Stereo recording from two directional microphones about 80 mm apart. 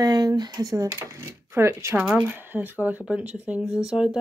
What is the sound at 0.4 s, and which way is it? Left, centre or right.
Speech, right.